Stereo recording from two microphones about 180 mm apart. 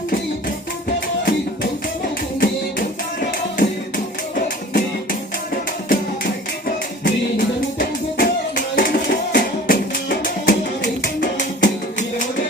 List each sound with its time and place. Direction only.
0.4 s music: 55° left (ahead or behind)
2.4 s music: 50° left (ahead or behind)
5.9 s music: 50° left (ahead or behind)